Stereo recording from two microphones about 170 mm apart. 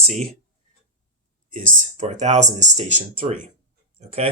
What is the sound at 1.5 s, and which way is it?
Speech, 55° right (ahead or behind).